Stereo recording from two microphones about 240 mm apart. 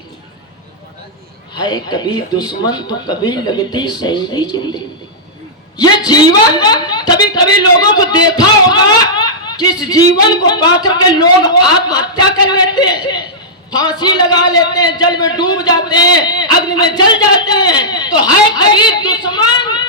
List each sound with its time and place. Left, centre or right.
1.5 s a man's voice: centre
5.8 s a man's voice: centre